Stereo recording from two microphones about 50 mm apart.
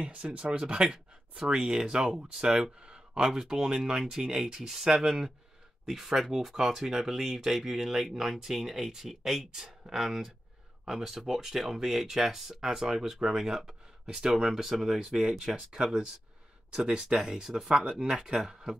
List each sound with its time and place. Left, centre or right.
0.0 s speech: right
2.8 s a sound: centre
3.3 s speech: centre